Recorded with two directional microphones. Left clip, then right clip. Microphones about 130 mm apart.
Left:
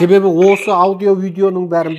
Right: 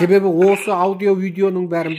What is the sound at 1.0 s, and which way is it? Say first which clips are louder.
Speech: left 3 dB; 5° right (ahead or behind).